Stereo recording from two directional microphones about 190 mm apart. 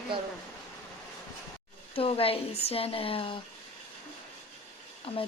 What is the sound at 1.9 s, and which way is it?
Speech, 30° left (ahead or behind).